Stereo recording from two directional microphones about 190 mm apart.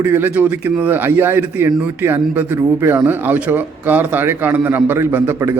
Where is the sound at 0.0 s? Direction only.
10° right (ahead or behind).